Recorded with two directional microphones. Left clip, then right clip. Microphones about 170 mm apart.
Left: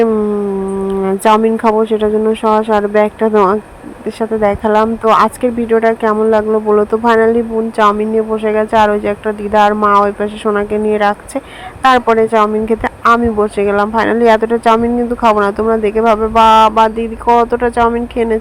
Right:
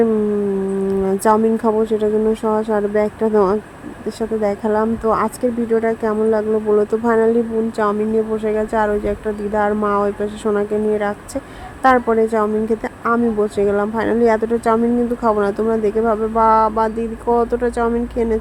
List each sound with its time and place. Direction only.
1.0 s speech: 15° left (ahead or behind)